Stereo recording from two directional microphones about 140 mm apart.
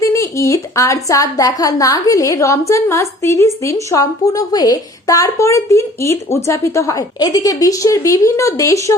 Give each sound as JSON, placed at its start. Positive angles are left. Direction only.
{"t": 0.0, "sound": "a woman's voice", "side_deg": 20}